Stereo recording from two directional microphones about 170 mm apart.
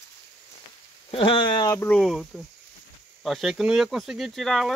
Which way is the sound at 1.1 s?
30° left (ahead or behind).